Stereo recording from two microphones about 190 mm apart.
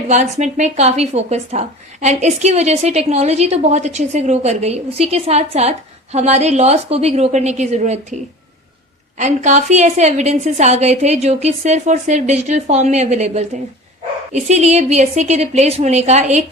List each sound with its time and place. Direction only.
0.1 s speech: 40° right (ahead or behind)